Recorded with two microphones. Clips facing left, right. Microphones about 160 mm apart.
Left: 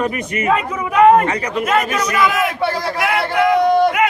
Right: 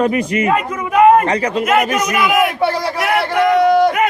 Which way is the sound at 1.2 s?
30° right (ahead or behind).